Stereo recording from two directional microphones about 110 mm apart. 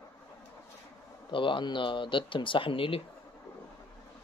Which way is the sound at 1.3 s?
50° left (ahead or behind).